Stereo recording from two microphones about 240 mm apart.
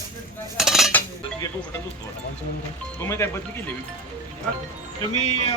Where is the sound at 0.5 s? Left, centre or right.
Centre.